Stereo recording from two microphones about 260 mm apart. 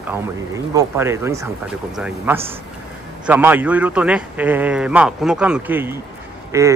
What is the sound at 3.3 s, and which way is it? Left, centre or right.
A man's voice, centre.